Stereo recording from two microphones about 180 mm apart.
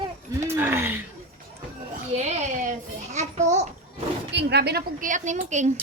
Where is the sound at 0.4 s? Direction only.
10° right (ahead or behind).